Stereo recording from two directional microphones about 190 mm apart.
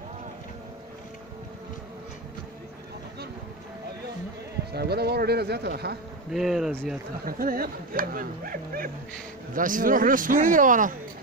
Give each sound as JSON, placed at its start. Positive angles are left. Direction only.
{"t": 4.7, "sound": "speech", "side_deg": -55}
{"t": 6.3, "sound": "speech", "side_deg": 0}
{"t": 7.2, "sound": "speech", "side_deg": -50}